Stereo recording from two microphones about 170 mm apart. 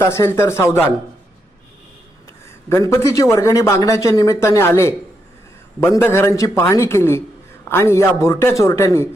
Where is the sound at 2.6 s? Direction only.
15° left (ahead or behind).